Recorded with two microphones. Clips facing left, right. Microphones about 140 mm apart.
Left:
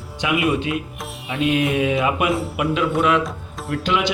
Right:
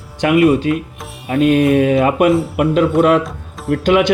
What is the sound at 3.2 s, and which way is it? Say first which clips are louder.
Music: right 5 dB; centre (ahead or behind).